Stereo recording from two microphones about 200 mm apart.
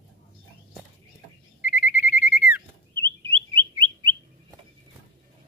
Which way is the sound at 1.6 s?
10° right (ahead or behind).